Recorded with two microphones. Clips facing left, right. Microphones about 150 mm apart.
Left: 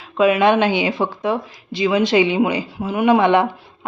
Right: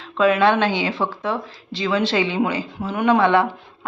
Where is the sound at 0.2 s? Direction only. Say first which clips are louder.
Left 2 dB; 15° left (ahead or behind).